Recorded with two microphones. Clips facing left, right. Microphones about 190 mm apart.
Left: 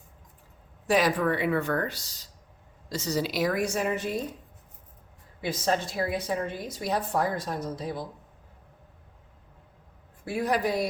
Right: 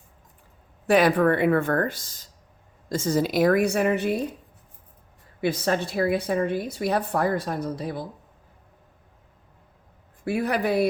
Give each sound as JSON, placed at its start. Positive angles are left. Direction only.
{"t": 0.9, "sound": "a woman's voice", "side_deg": -60}
{"t": 5.4, "sound": "a woman's voice", "side_deg": -60}
{"t": 10.2, "sound": "a woman's voice", "side_deg": -65}